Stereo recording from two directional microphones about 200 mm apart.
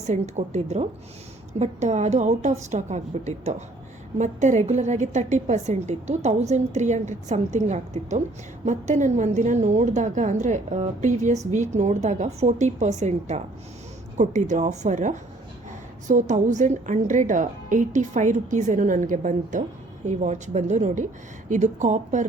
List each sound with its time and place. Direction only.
0.0 s a woman's voice: 35° right (ahead or behind)